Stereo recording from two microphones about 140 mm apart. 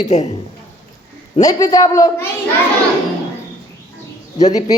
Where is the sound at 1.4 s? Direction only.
25° left (ahead or behind).